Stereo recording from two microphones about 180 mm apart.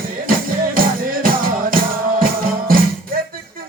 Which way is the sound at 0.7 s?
50° right (ahead or behind).